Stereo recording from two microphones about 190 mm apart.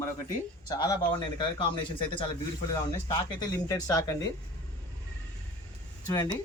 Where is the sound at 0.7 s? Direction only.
20° left (ahead or behind).